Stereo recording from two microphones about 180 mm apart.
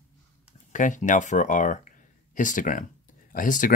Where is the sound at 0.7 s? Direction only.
45° left (ahead or behind).